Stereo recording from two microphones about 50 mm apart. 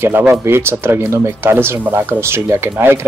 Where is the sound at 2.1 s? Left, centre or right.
Right.